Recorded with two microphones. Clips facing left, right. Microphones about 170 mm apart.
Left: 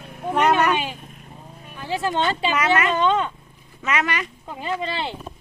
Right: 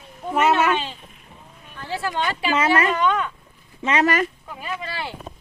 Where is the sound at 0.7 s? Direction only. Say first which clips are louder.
Left 1 dB; 15° left (ahead or behind).